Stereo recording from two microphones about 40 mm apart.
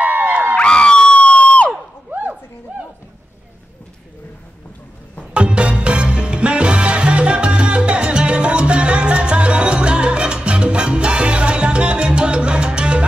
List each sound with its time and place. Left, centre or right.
0.0 s crowd: right
0.6 s crowd: left
2.0 s a sound: right
5.3 s music: right